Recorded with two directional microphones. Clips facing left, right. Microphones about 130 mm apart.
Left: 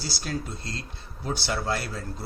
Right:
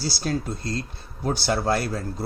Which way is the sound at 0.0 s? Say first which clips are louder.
Right 6 dB; 35° right (ahead or behind).